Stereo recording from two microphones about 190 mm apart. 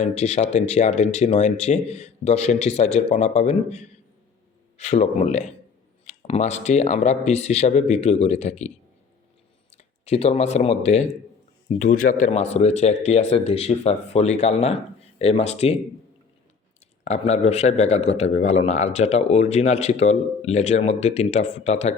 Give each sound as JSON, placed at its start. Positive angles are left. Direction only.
{"t": 0.0, "sound": "a man's voice", "side_deg": 35}
{"t": 9.7, "sound": "speech", "side_deg": 35}
{"t": 11.7, "sound": "a man's voice", "side_deg": 45}
{"t": 17.0, "sound": "a man's voice", "side_deg": 35}